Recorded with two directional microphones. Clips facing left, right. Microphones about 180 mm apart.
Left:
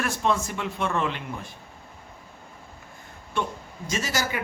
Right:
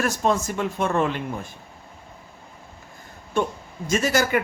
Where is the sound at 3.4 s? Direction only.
45° right (ahead or behind).